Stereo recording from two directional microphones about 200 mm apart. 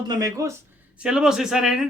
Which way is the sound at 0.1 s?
15° right (ahead or behind).